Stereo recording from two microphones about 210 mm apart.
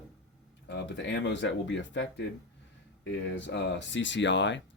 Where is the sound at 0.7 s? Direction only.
55° left (ahead or behind).